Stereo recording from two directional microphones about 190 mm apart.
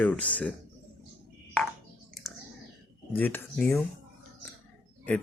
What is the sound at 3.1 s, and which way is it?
Speech, 10° left (ahead or behind).